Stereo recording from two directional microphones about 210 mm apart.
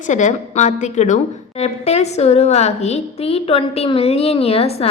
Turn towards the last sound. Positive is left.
turn(degrees=30)  # may be behind; listen again after turning